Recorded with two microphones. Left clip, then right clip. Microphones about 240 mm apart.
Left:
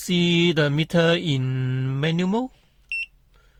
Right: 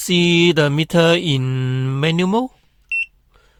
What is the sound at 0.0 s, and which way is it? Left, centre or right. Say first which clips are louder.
Mantra: right 6 dB; right.